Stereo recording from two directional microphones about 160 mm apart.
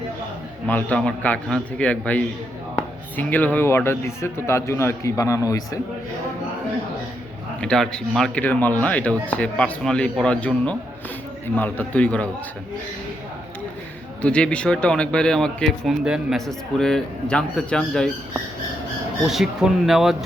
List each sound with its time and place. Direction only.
0.7 s speech: 10° left (ahead or behind)
7.6 s speech: 5° left (ahead or behind)
14.2 s a man's voice: 5° left (ahead or behind)
19.3 s a man's voice: centre (ahead or behind)